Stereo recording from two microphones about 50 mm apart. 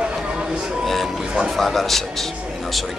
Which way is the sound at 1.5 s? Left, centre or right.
Centre.